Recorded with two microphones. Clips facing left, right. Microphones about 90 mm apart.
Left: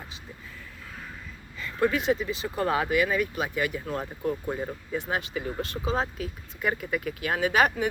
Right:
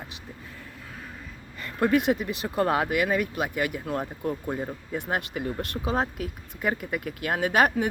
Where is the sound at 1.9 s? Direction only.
60° right (ahead or behind).